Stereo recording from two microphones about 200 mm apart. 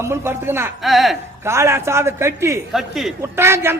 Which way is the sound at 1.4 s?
15° right (ahead or behind).